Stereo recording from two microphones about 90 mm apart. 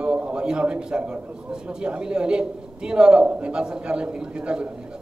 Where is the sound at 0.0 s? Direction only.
10° right (ahead or behind).